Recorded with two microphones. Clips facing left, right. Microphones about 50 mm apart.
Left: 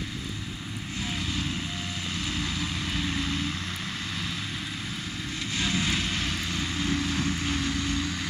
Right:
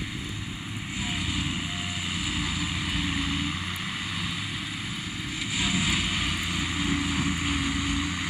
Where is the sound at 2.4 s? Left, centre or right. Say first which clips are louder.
Right 1 dB; centre.